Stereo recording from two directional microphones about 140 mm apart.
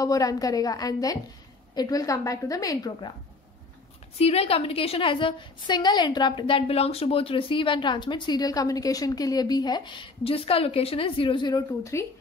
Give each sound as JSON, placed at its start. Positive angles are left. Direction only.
{"t": 0.0, "sound": "a woman's voice", "side_deg": 25}
{"t": 4.2, "sound": "a woman's voice", "side_deg": 45}
{"t": 11.8, "sound": "a woman's voice", "side_deg": 20}